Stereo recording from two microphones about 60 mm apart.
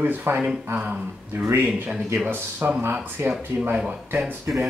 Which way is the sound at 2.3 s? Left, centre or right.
Right.